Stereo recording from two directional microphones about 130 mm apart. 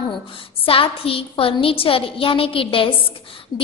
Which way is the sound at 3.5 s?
35° left (ahead or behind).